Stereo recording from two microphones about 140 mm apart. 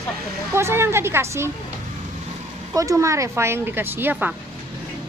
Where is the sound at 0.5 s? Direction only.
20° right (ahead or behind).